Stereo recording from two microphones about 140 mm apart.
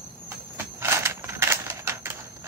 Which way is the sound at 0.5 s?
20° right (ahead or behind).